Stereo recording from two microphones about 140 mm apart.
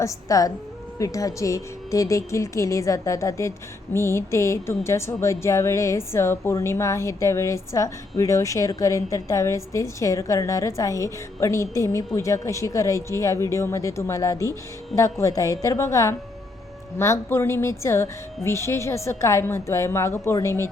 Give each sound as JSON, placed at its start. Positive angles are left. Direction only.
{"t": 0.0, "sound": "a woman's voice", "side_deg": 25}